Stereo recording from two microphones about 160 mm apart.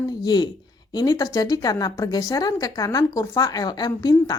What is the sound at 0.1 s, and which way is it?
Speech, 25° left (ahead or behind).